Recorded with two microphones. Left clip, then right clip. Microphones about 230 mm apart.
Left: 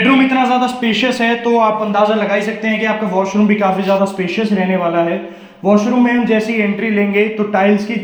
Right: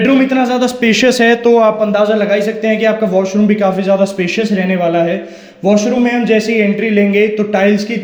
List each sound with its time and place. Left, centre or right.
0.0 s a man's voice: right
5.6 s a man's voice: right